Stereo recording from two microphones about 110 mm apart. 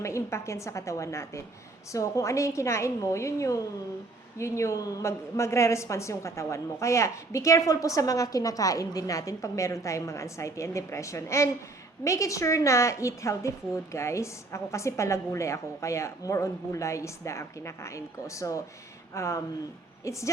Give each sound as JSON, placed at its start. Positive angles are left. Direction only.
{"t": 0.0, "sound": "a woman's voice", "side_deg": 25}